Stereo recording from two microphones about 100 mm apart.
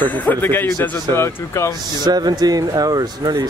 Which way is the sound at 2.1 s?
40° right (ahead or behind).